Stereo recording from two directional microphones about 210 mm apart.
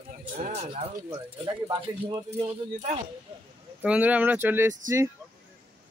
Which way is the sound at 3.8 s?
5° right (ahead or behind).